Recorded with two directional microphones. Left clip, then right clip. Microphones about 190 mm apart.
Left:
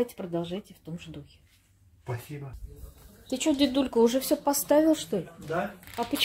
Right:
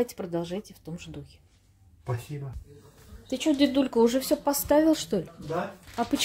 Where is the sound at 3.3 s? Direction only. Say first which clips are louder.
Right 1 dB; 5° left (ahead or behind).